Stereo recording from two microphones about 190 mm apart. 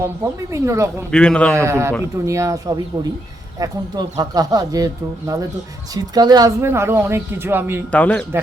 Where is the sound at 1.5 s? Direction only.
15° right (ahead or behind).